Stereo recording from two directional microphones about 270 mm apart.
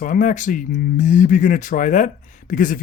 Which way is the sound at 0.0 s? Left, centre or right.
Left.